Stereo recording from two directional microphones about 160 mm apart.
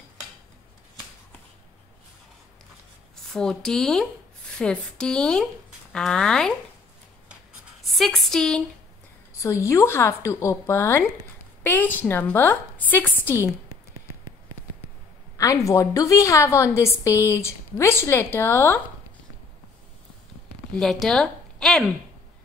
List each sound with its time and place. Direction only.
3.3 s speech: 5° left (ahead or behind)
7.8 s speech: centre (ahead or behind)
9.4 s a woman's voice: 20° left (ahead or behind)
15.3 s a woman's voice: 20° left (ahead or behind)
20.7 s speech: centre (ahead or behind)